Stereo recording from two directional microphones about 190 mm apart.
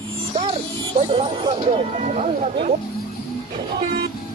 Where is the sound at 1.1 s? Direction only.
30° right (ahead or behind).